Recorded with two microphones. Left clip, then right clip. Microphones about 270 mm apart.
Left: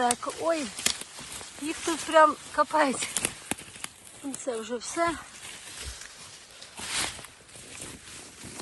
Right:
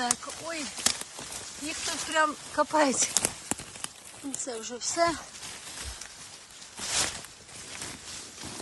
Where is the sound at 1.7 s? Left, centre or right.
Centre.